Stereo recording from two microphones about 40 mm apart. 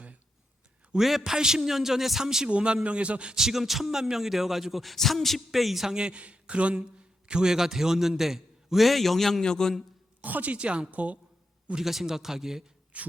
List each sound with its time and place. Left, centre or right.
0.9 s a man's voice: centre
2.5 s speech: right
3.3 s speech: centre
5.8 s speech: centre
7.3 s a man's voice: centre
9.4 s a man's voice: centre
10.2 s a woman's voice: right
11.8 s a man's voice: centre
12.9 s a woman's voice: right